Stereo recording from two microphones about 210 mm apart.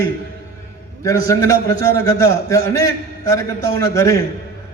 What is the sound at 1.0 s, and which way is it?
A man's voice, 15° left (ahead or behind).